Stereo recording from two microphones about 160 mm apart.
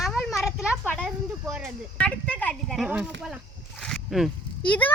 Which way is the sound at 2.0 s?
5° left (ahead or behind).